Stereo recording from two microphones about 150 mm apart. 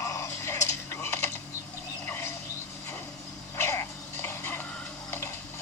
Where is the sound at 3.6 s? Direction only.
15° left (ahead or behind).